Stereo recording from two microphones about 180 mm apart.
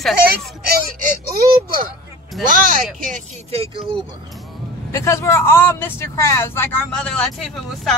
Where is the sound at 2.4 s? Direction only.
50° right (ahead or behind).